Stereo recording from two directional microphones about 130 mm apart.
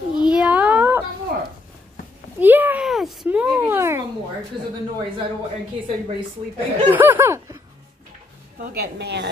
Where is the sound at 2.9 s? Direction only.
Centre (ahead or behind).